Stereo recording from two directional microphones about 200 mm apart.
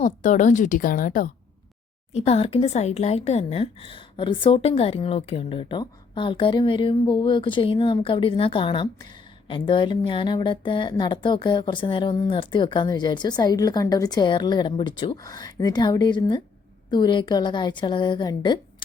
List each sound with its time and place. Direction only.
0.0 s a woman's voice: 40° left (ahead or behind)
2.1 s speech: 30° left (ahead or behind)